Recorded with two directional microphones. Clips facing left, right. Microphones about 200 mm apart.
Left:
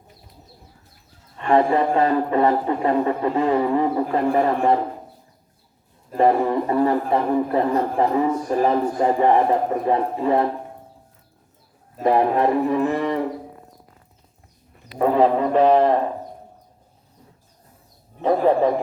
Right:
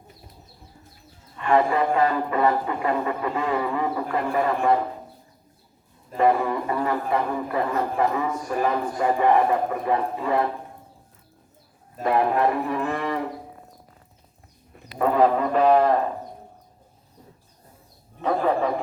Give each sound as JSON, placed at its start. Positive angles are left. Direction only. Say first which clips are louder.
{"t": 1.4, "sound": "a man's voice", "louder": "left 3 dB", "side_deg": 30}
{"t": 6.7, "sound": "a man's voice", "louder": "left 5 dB", "side_deg": 35}
{"t": 12.0, "sound": "speech", "louder": "left 3 dB", "side_deg": 30}
{"t": 14.9, "sound": "speech", "louder": "left 2 dB", "side_deg": 20}
{"t": 18.2, "sound": "a man's voice", "louder": "left 5 dB", "side_deg": 30}